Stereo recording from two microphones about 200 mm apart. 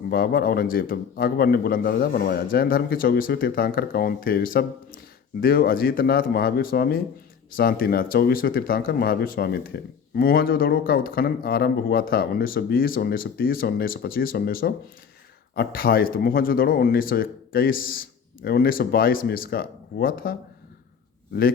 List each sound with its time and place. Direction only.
0.1 s speech: 50° left (ahead or behind)